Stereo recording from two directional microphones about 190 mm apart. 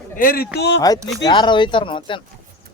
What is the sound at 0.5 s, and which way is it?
Speech, 65° left (ahead or behind).